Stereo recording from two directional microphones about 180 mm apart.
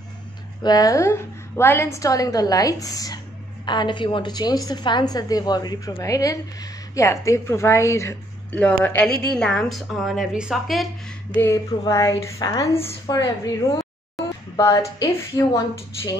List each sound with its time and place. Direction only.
0.7 s a woman's voice: 20° left (ahead or behind); by 10.9 s centre (ahead or behind)
11.4 s a sound: 15° left (ahead or behind)
12.7 s a woman's voice: 25° left (ahead or behind)